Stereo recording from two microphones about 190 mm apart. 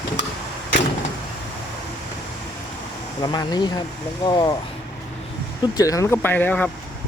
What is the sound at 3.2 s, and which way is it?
Speech, 20° left (ahead or behind).